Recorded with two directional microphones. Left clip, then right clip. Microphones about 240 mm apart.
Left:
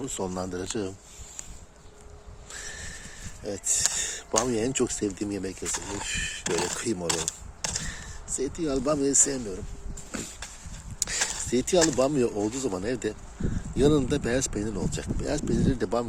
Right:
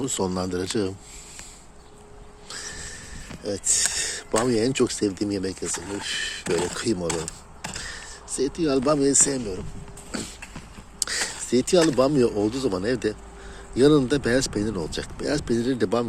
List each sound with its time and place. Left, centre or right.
0.0 s speech: centre
2.5 s a sound: centre
3.4 s speech: centre
5.6 s speech: left
6.4 s speech: left
6.7 s speech: centre
7.1 s a sound: left
7.8 s speech: centre
10.1 s vehicle: centre
11.0 s speech: centre